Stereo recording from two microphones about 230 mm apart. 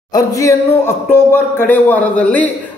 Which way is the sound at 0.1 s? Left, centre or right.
Centre.